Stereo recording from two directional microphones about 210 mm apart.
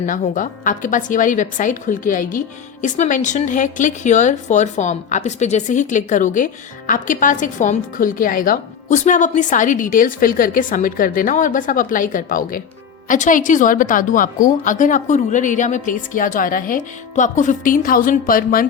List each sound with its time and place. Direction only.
0.0 s a woman's voice: 40° left (ahead or behind)